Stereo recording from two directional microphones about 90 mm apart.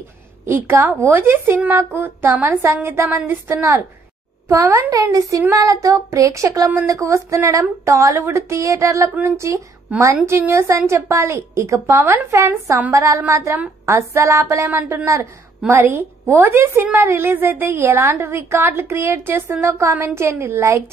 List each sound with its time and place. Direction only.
0.5 s a woman's voice: 30° right (ahead or behind)
4.5 s a woman's voice: 35° right (ahead or behind)
14.7 s a woman's voice: 25° right (ahead or behind)